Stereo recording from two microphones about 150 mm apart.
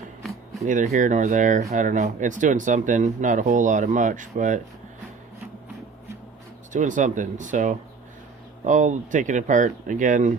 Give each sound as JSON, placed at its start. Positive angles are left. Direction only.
{"t": 0.2, "sound": "a sound", "side_deg": 0}
{"t": 0.6, "sound": "speech", "side_deg": -60}
{"t": 6.7, "sound": "speech", "side_deg": -55}